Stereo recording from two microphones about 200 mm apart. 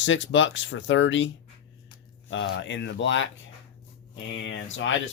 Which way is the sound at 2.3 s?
60° left (ahead or behind).